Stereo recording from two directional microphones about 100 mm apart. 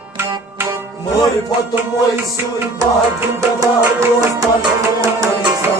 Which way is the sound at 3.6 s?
35° right (ahead or behind).